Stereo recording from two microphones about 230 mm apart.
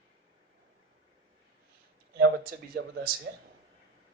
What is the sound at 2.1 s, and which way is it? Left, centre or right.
Speech, right.